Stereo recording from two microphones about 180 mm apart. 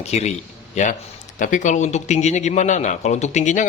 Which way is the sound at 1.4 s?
45° left (ahead or behind).